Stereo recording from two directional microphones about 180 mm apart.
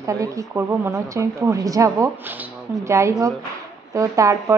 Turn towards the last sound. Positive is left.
turn(degrees=-20)  # may be behind; listen again after turning